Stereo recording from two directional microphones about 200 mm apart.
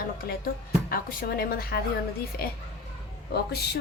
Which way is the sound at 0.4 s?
45° left (ahead or behind).